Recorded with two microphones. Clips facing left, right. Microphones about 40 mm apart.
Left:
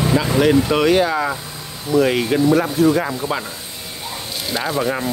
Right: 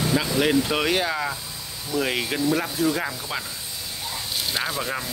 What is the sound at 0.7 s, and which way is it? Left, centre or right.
Speech, centre.